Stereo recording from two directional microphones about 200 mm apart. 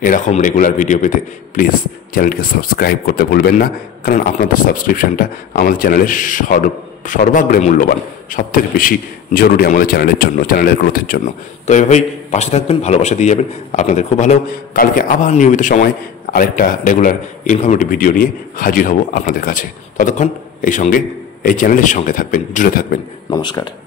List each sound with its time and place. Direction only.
0.0 s a man's voice: 40° left (ahead or behind)
11.6 s a man's voice: 35° left (ahead or behind)
23.3 s speech: 20° left (ahead or behind)